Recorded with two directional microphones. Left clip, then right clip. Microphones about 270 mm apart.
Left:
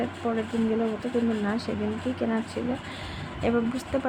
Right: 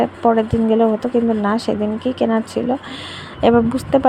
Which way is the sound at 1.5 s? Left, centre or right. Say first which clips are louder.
Right 11 dB; right.